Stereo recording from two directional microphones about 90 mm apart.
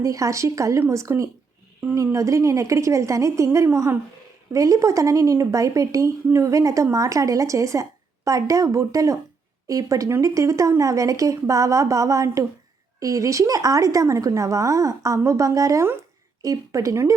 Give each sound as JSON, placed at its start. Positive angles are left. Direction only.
{"t": 0.0, "sound": "a woman's voice", "side_deg": -35}